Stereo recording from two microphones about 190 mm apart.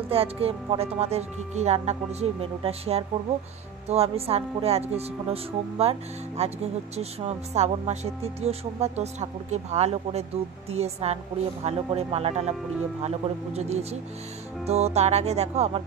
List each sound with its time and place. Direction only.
0.1 s speech: 30° right (ahead or behind)